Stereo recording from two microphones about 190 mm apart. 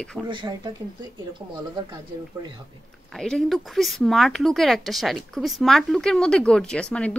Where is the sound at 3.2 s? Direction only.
Centre (ahead or behind).